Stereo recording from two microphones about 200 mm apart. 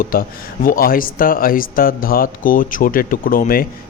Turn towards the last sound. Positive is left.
turn(degrees=45)  # may be behind; listen again after turning